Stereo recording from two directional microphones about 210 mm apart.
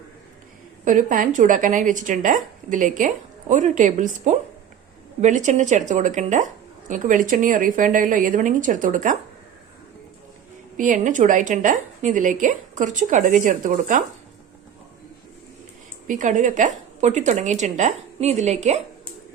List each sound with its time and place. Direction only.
0.9 s speech: 40° right (ahead or behind)
10.8 s speech: 40° right (ahead or behind)
16.0 s speech: 35° right (ahead or behind)